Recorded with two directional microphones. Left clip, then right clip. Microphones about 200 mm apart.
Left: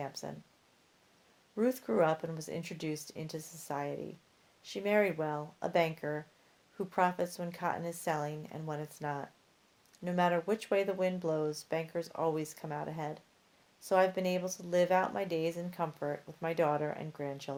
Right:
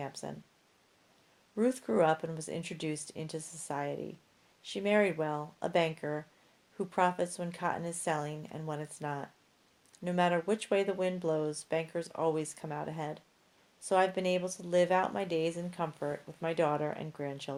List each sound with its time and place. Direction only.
0.0 s speech: 35° right (ahead or behind)
1.5 s speech: 35° right (ahead or behind)